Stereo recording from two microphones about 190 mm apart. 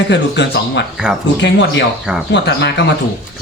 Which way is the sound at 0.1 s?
65° left (ahead or behind).